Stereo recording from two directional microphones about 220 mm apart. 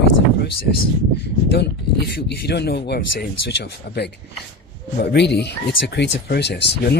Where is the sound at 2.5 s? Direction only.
50° left (ahead or behind).